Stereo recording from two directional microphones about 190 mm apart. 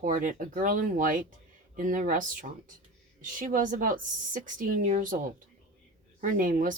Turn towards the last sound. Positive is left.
turn(degrees=-45)  # may be behind; listen again after turning